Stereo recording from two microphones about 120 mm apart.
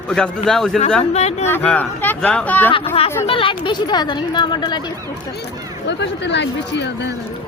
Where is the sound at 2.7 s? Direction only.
55° left (ahead or behind); by 4.9 s 35° left (ahead or behind).